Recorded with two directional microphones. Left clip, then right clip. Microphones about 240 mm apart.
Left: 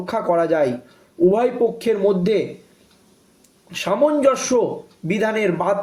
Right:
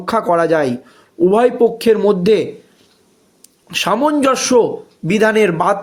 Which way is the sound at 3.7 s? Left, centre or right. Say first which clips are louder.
Right 3 dB; right.